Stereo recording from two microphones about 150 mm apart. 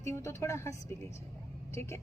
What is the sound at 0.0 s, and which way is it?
Speech, 20° left (ahead or behind).